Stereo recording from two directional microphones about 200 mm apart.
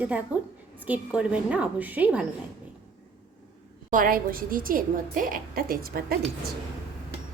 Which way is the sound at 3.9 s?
45° right (ahead or behind).